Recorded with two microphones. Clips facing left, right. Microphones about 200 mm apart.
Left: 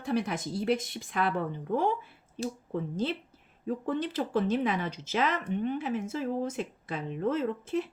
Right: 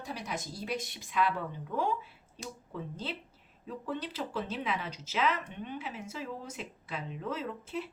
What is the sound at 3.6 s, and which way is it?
Speech, 50° left (ahead or behind).